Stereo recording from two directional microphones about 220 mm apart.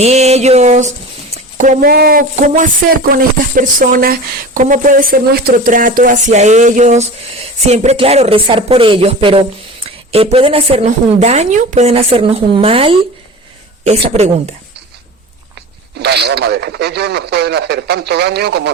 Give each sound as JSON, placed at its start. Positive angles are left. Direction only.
{"t": 0.0, "sound": "a woman's voice", "side_deg": -30}
{"t": 16.0, "sound": "speech", "side_deg": -50}